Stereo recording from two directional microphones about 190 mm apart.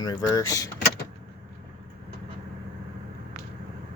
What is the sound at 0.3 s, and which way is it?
Speech, 15° left (ahead or behind).